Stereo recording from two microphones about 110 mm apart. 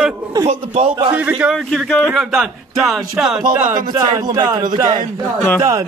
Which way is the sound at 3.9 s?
35° right (ahead or behind).